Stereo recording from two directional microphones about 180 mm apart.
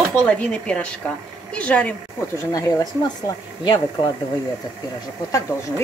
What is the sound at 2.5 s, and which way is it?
Speech, 20° left (ahead or behind).